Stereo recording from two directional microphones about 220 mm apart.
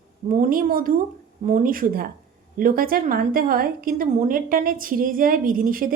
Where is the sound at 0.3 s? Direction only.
40° right (ahead or behind).